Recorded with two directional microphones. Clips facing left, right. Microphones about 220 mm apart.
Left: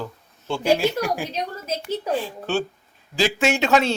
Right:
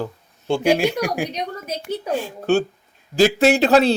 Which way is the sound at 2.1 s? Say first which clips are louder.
Right 5 dB; 45° right (ahead or behind).